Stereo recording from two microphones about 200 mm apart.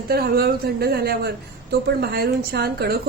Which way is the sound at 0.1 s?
50° right (ahead or behind).